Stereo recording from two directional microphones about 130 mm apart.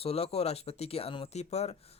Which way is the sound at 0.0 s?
50° left (ahead or behind).